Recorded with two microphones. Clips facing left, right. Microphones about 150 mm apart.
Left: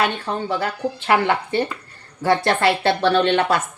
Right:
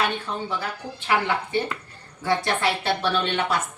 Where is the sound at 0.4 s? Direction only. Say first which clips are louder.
Left 7 dB; 65° left (ahead or behind).